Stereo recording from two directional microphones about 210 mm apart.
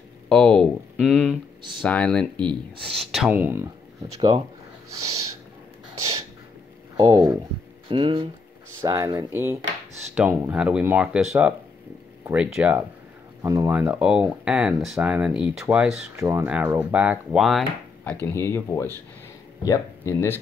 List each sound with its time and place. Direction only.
0.3 s speech: 5° left (ahead or behind)
7.0 s speech: 20° right (ahead or behind)
12.3 s speech: 10° right (ahead or behind)
18.2 s speech: 10° left (ahead or behind)